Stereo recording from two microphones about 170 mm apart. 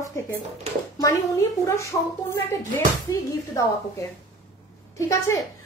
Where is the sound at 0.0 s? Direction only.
20° left (ahead or behind).